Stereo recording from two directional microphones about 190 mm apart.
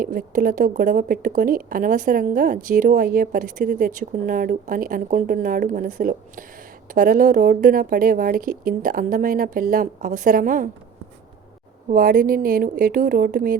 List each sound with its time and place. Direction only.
0.0 s speech: 50° right (ahead or behind)
11.9 s speech: 50° right (ahead or behind)